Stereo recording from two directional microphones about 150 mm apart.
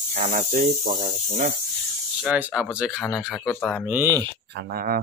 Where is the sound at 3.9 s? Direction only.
20° right (ahead or behind).